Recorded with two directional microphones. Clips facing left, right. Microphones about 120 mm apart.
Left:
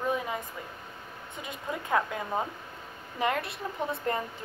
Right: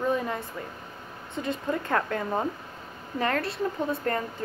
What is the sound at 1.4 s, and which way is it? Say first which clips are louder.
A woman's voice: right 7 dB; 5° left (ahead or behind).